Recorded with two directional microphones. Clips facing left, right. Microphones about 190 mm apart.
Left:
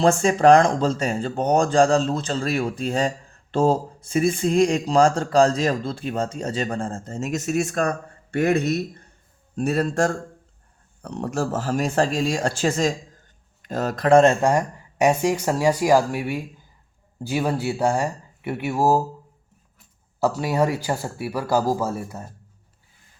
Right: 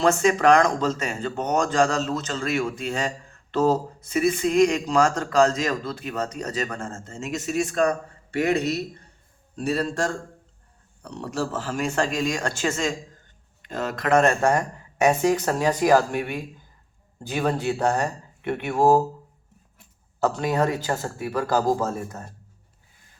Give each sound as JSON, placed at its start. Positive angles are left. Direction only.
{"t": 0.0, "sound": "a man's voice", "side_deg": 30}
{"t": 15.0, "sound": "speech", "side_deg": 10}
{"t": 20.1, "sound": "speech", "side_deg": 10}